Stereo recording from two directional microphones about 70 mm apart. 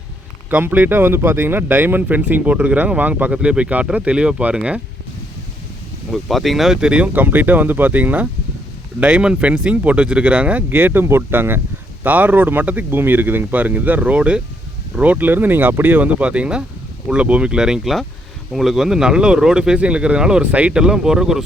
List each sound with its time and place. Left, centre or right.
0.5 s speech: right
6.1 s speech: centre
7.1 s speech: right
10.7 s speech: right; by 21.4 s centre